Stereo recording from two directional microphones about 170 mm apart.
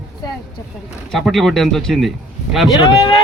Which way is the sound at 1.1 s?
Centre (ahead or behind).